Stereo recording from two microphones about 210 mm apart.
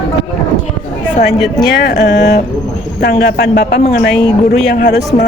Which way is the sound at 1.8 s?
55° left (ahead or behind).